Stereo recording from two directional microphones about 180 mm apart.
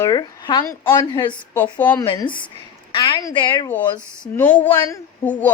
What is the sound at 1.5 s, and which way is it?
Speech, 10° left (ahead or behind).